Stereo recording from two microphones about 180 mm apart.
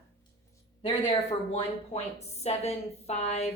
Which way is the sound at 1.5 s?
35° left (ahead or behind).